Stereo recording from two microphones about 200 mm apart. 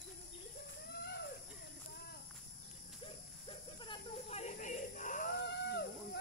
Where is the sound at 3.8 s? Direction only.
25° left (ahead or behind).